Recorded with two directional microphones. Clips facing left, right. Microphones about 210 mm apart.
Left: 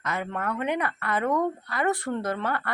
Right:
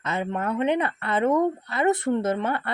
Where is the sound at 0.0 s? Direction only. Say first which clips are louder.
Right 3 dB; 25° right (ahead or behind).